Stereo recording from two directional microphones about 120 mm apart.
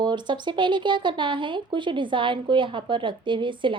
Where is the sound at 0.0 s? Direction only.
40° right (ahead or behind).